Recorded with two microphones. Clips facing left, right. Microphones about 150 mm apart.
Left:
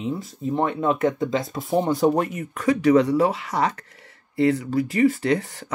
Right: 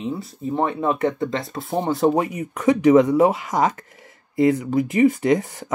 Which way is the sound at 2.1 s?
10° right (ahead or behind).